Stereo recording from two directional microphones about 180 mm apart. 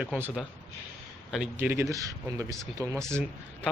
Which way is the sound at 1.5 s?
10° right (ahead or behind).